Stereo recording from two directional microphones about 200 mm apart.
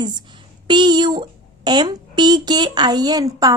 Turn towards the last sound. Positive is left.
turn(degrees=-20)  # may be behind; listen again after turning